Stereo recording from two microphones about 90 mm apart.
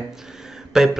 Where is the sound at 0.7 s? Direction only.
5° right (ahead or behind).